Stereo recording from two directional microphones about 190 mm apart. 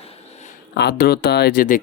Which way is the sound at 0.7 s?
60° left (ahead or behind).